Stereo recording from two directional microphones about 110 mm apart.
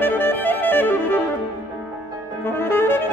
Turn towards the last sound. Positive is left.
turn(degrees=20)  # may be behind; listen again after turning